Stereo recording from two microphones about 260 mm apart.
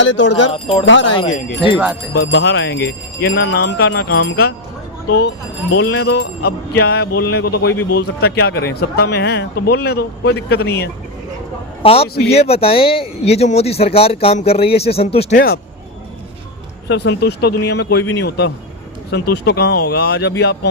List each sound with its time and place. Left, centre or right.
0.5 s speech: left
0.9 s speech: left
1.1 s speech: left
1.7 s speech: centre
2.1 s speech: left
5.7 s speech: left
6.1 s speech: left
11.8 s a man's voice: left
16.9 s speech: left